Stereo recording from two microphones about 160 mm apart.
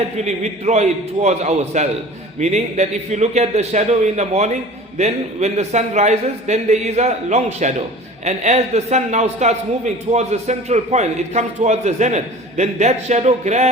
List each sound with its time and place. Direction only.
0.3 s a man's voice: 45° right (ahead or behind)